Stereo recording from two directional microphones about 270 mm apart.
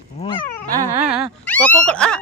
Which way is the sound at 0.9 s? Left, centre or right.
Centre.